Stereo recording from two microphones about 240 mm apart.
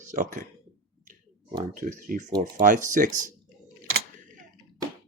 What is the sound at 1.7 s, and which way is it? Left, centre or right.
Speech, right.